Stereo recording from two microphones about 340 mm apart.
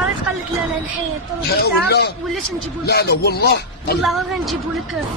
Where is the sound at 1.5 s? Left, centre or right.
Left.